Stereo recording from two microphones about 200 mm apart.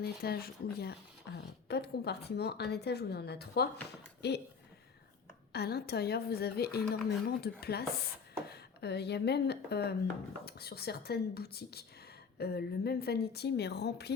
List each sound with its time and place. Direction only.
0.0 s a woman's voice: 50° left (ahead or behind)
5.5 s a woman's voice: 55° left (ahead or behind)